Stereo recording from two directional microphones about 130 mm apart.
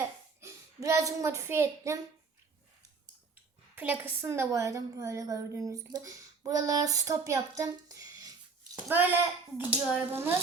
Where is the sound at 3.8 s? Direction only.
15° right (ahead or behind).